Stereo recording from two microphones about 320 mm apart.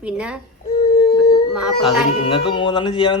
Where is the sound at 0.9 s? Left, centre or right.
Left.